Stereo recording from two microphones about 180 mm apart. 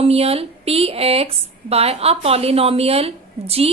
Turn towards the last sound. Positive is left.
turn(degrees=-35)  # may be behind; listen again after turning